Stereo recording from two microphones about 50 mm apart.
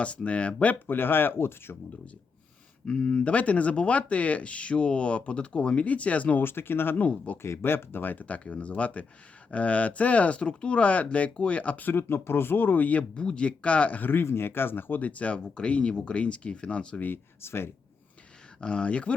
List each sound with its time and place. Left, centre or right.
0.0 s speech: left
0.9 s speech: left
2.8 s speech: left
6.4 s speech: left
7.4 s speech: left
7.7 s speech: left
11.9 s speech: left
14.0 s speech: left
17.4 s speech: left
18.6 s speech: centre